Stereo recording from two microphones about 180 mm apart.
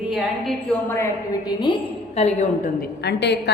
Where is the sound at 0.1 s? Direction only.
Centre (ahead or behind).